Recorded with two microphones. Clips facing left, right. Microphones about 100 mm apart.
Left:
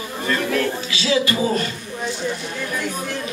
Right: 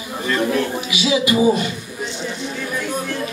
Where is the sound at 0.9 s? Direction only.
15° right (ahead or behind).